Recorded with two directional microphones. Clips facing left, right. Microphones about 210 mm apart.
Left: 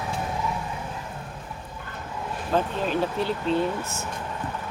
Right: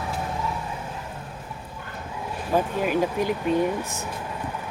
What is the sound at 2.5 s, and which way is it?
Speech, 10° right (ahead or behind).